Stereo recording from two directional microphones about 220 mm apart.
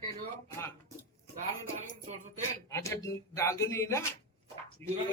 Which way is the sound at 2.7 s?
15° left (ahead or behind).